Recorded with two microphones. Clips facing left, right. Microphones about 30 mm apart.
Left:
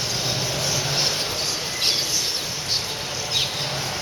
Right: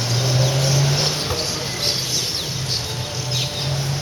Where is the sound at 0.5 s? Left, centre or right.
Centre.